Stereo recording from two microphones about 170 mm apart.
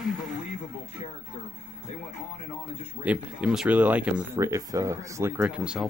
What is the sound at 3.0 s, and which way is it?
Speech, 10° right (ahead or behind).